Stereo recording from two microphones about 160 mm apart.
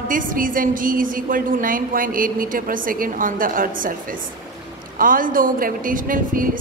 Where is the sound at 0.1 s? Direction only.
60° right (ahead or behind).